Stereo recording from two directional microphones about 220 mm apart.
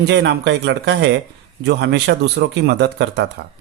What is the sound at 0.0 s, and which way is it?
Speech, 50° right (ahead or behind).